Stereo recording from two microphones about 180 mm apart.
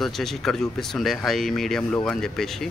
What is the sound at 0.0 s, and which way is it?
Speech, centre (ahead or behind).